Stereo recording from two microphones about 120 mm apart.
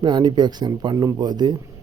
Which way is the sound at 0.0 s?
35° right (ahead or behind).